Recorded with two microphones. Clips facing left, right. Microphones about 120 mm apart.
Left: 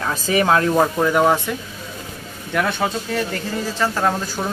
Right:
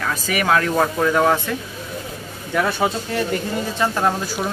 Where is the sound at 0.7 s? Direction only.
10° left (ahead or behind).